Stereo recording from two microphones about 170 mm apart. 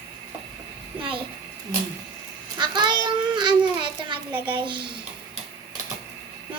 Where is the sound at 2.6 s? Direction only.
25° right (ahead or behind).